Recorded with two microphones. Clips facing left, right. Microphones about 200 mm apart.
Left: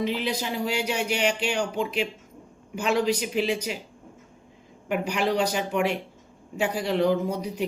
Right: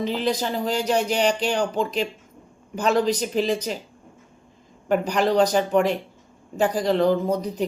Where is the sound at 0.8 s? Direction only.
40° right (ahead or behind).